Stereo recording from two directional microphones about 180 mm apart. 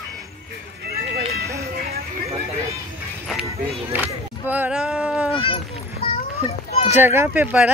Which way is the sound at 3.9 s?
10° right (ahead or behind).